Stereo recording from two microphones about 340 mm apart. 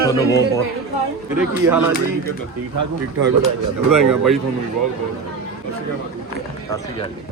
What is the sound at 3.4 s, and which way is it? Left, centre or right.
Speech, right.